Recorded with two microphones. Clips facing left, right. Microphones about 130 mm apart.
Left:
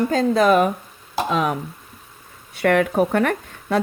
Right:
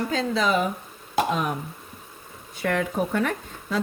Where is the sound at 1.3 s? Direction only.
90° left.